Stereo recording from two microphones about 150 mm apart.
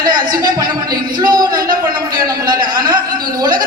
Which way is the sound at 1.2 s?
25° right (ahead or behind).